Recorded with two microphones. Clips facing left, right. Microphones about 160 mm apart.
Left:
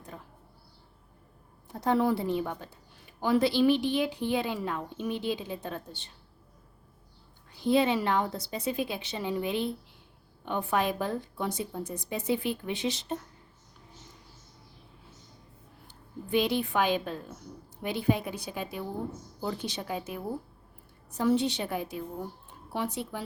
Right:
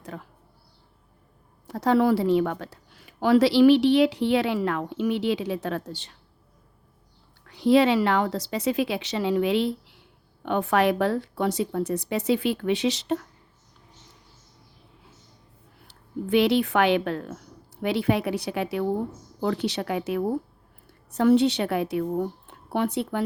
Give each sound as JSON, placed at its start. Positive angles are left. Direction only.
{"t": 0.0, "sound": "a sound", "side_deg": -80}
{"t": 1.6, "sound": "a woman's voice", "side_deg": -85}
{"t": 7.4, "sound": "a woman's voice", "side_deg": -80}
{"t": 15.9, "sound": "speech", "side_deg": -75}